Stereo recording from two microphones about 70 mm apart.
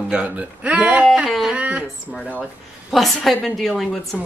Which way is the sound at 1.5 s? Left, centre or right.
Centre.